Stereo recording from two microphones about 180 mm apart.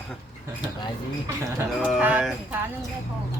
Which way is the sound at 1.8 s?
5° right (ahead or behind).